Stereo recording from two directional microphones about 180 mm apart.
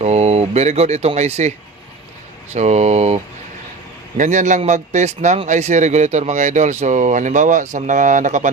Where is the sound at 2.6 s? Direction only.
40° right (ahead or behind).